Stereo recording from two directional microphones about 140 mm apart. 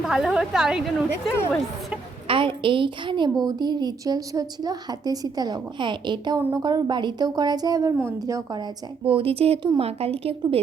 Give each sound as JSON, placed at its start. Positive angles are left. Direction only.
{"t": 0.0, "sound": "a woman's voice", "side_deg": -5}
{"t": 2.2, "sound": "a woman's voice", "side_deg": -40}
{"t": 9.0, "sound": "speech", "side_deg": -40}